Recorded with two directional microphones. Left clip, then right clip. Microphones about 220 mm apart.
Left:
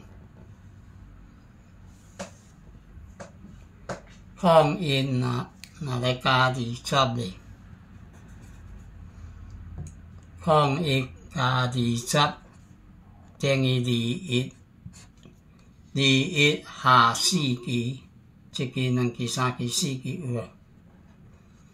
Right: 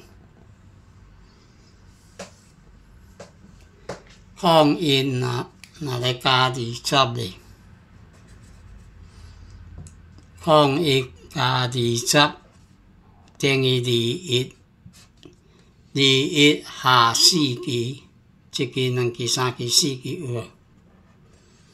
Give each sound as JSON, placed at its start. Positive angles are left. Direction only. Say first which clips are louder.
{"t": 4.4, "sound": "speech", "louder": "right 3 dB", "side_deg": -50}
{"t": 10.4, "sound": "speech", "louder": "right 5 dB", "side_deg": -50}
{"t": 13.4, "sound": "speech", "louder": "right 5 dB", "side_deg": -50}
{"t": 16.0, "sound": "speech", "louder": "right 5 dB", "side_deg": -45}